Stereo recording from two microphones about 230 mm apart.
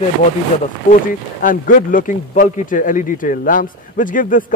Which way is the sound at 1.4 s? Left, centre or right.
Left.